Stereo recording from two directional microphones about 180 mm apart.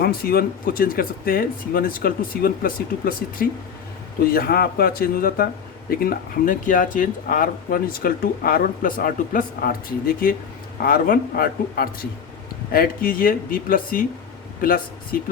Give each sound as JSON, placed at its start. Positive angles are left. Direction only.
{"t": 0.0, "sound": "speech", "side_deg": 55}